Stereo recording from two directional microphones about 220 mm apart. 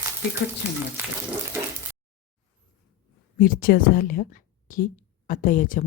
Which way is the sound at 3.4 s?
40° left (ahead or behind).